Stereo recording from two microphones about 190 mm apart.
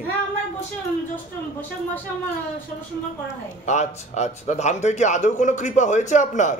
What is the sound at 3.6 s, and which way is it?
Speech, 35° left (ahead or behind).